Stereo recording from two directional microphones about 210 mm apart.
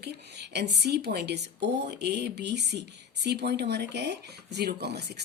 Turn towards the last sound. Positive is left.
turn(degrees=-50)  # may be behind; listen again after turning